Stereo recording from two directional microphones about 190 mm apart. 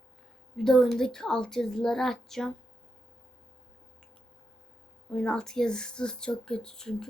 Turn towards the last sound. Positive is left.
turn(degrees=5)  # may be behind; listen again after turning